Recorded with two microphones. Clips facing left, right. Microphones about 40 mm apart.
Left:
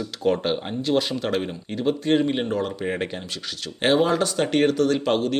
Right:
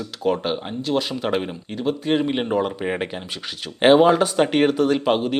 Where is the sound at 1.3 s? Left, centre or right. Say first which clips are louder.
Right 2 dB; centre.